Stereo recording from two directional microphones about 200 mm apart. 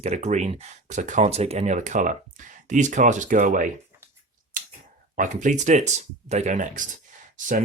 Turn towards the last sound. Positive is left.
turn(degrees=-40)  # may be behind; listen again after turning